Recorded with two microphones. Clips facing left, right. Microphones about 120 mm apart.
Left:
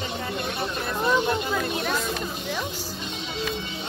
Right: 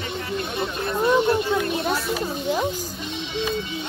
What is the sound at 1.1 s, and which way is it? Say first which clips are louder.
Speech: right 5 dB; 25° right (ahead or behind).